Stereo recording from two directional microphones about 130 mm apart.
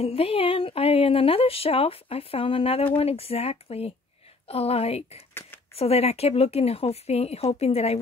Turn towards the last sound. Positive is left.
turn(degrees=50)  # may be behind; listen again after turning